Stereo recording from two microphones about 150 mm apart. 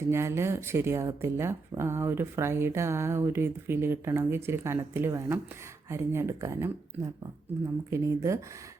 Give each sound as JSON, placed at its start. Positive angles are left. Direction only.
{"t": 0.1, "sound": "speech", "side_deg": -15}